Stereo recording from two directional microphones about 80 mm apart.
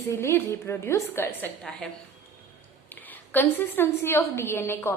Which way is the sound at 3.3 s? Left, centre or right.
Left.